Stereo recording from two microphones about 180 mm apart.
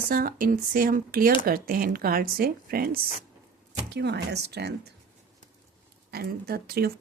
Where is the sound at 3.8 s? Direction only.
70° right (ahead or behind).